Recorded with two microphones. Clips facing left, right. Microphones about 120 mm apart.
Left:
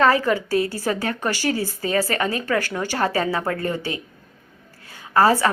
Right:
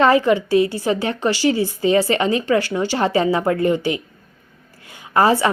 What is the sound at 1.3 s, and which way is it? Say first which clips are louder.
Speech: right 7 dB; 50° left (ahead or behind).